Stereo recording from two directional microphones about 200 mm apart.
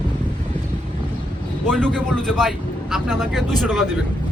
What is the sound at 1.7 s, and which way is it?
Speech, 5° left (ahead or behind).